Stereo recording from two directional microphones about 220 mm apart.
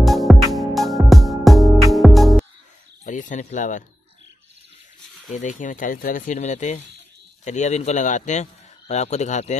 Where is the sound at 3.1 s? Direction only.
35° left (ahead or behind).